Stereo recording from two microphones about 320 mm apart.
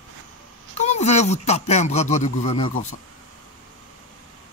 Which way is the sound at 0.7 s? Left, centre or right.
Left.